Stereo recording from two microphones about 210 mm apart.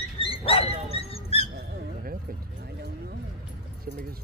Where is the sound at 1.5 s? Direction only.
45° right (ahead or behind).